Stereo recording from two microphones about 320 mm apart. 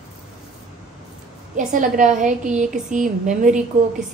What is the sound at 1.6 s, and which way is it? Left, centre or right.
A woman's voice, right.